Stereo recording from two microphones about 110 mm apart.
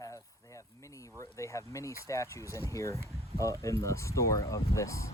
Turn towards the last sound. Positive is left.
turn(degrees=30)  # may be behind; listen again after turning